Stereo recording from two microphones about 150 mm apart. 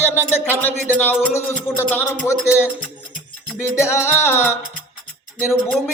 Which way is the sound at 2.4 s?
10° right (ahead or behind).